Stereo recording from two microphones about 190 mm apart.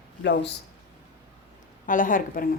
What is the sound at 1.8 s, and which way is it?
Speech, 45° left (ahead or behind).